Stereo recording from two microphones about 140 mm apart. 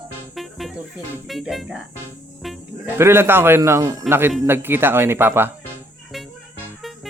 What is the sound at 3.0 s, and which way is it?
Speech, 15° right (ahead or behind).